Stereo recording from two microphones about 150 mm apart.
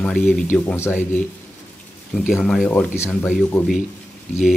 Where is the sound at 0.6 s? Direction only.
15° left (ahead or behind).